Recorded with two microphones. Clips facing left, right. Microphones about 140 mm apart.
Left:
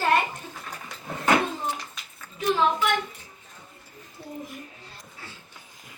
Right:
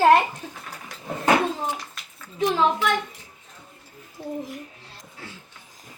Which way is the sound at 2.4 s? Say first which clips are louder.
Right 2 dB; 90° right.